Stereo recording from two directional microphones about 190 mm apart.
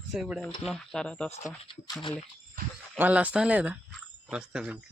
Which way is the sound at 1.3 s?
35° left (ahead or behind).